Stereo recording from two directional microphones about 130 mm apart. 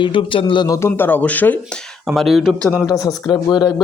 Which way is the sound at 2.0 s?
Centre (ahead or behind).